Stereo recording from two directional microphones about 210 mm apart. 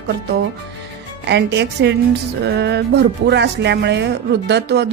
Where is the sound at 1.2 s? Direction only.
55° right (ahead or behind).